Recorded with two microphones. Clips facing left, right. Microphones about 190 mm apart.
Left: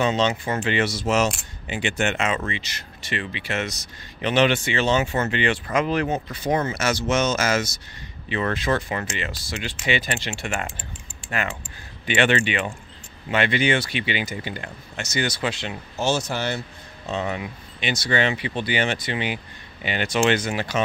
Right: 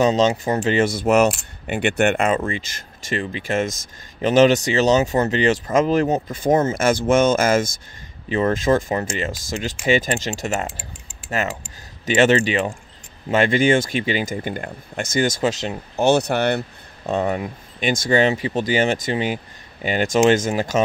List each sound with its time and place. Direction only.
0.0 s speech: 40° right (ahead or behind)
8.3 s speech: 30° right (ahead or behind)
8.5 s speech: 45° right (ahead or behind)
12.1 s speech: 40° right (ahead or behind)
16.0 s speech: 60° right (ahead or behind); by 20.8 s 45° right (ahead or behind)